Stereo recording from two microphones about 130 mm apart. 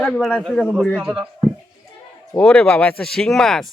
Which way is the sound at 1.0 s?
10° right (ahead or behind).